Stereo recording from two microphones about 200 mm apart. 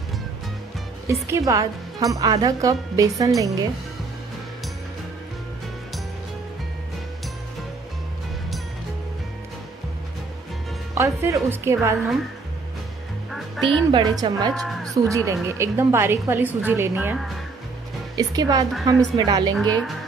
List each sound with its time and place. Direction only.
1.0 s speech: 15° right (ahead or behind)
11.0 s speech: 15° right (ahead or behind)
13.3 s music: 5° left (ahead or behind)
13.9 s a woman's voice: 20° right (ahead or behind)
14.5 s speech: centre (ahead or behind)
15.0 s speech: 15° right (ahead or behind)
18.1 s a woman's voice: 20° right (ahead or behind)
19.5 s speech: 5° left (ahead or behind)